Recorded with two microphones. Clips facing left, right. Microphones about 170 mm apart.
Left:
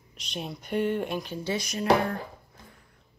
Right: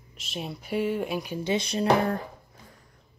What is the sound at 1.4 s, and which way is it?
Speech, 25° right (ahead or behind).